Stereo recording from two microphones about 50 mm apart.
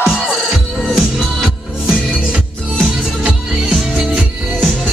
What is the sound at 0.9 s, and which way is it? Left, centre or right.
Music, centre.